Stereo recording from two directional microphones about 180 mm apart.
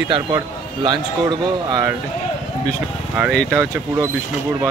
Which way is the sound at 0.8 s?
25° right (ahead or behind).